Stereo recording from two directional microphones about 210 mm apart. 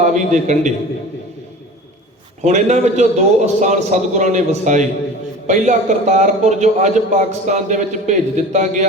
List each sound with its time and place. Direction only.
0.0 s a man's voice: 35° right (ahead or behind)
2.4 s a man's voice: 35° right (ahead or behind)